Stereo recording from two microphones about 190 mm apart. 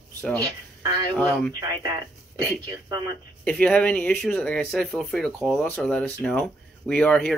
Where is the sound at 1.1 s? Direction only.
5° left (ahead or behind).